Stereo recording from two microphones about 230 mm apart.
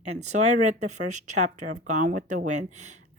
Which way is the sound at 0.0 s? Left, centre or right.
Right.